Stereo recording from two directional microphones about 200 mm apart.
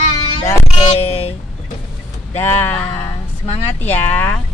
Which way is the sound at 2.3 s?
10° left (ahead or behind).